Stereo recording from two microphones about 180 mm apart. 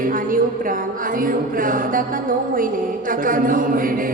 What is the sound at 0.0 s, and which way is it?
A woman's voice, 50° right (ahead or behind).